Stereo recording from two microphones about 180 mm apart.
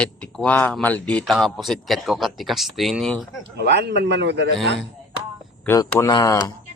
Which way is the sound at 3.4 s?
75° right (ahead or behind).